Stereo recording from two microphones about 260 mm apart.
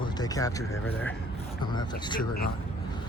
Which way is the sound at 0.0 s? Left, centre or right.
Centre.